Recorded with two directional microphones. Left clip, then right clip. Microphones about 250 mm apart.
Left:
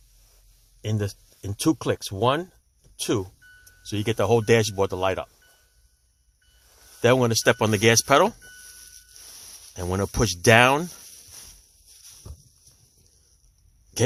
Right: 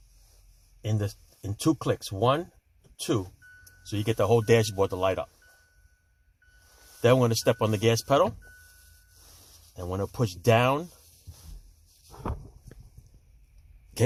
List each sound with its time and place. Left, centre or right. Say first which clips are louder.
0.8 s speech: left 3 dB; left
7.0 s speech: left 3 dB; left
9.7 s speech: left 5 dB; left
14.0 s a sound: left 3 dB; centre